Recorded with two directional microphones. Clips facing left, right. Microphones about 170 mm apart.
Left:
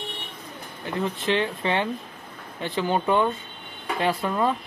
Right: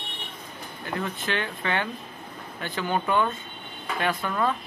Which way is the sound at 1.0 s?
25° left (ahead or behind).